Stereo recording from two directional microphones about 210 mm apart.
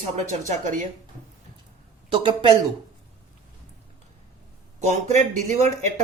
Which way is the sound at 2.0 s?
25° right (ahead or behind).